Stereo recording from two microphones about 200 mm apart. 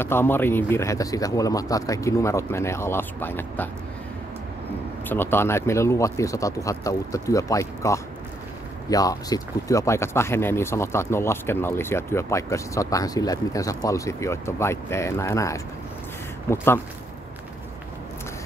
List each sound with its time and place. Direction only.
0.0 s speech: 10° left (ahead or behind)
5.0 s speech: 10° left (ahead or behind)